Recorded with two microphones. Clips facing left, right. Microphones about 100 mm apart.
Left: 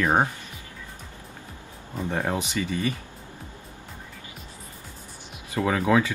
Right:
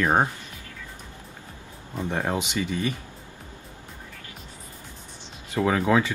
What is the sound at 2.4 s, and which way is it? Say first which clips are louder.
Speech: even; 15° right (ahead or behind).